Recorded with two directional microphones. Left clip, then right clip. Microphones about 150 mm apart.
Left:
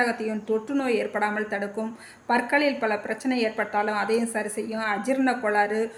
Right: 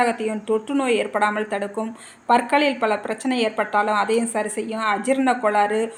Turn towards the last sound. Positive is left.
turn(degrees=-20)  # may be behind; listen again after turning